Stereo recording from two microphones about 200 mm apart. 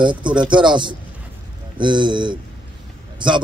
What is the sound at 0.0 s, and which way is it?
A man's voice, 25° right (ahead or behind).